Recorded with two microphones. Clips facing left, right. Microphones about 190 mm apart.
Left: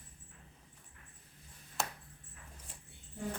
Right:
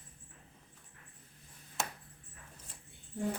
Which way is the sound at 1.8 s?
Centre (ahead or behind).